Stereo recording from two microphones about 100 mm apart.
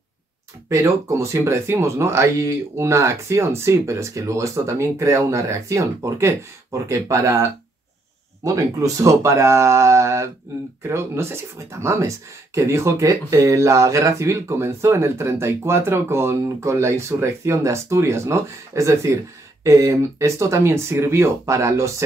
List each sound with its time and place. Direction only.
0.7 s speech: 30° right (ahead or behind)
8.5 s speech: 35° right (ahead or behind)